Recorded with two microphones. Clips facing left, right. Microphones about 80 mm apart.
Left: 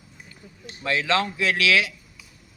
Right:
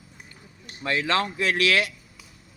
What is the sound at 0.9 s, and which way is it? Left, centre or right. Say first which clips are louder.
A man's voice: left 1 dB; right.